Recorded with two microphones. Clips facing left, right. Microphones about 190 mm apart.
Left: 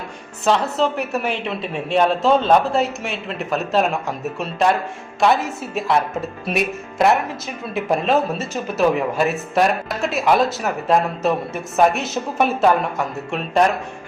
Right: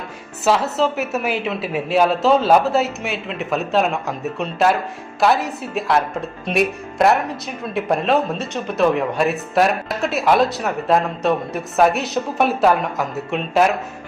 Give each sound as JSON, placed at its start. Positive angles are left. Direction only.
{"t": 0.4, "sound": "speech", "side_deg": -5}